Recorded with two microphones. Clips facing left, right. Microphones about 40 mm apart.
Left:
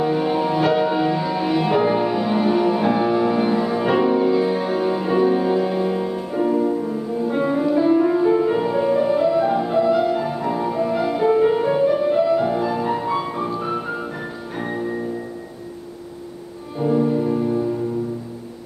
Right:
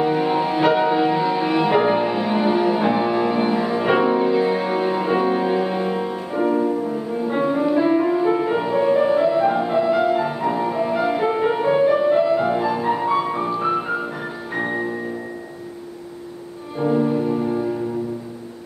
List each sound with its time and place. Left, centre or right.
0.0 s music: centre
16.8 s music: right